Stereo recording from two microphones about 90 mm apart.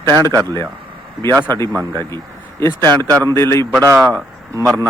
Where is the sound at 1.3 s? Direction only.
45° right (ahead or behind).